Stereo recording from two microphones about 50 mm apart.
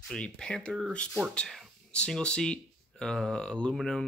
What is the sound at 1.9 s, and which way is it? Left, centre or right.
Speech, left.